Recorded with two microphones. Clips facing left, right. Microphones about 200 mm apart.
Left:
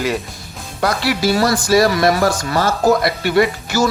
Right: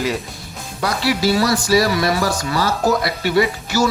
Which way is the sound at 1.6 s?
50° left (ahead or behind).